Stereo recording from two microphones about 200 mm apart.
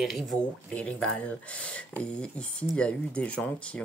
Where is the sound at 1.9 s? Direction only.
5° left (ahead or behind).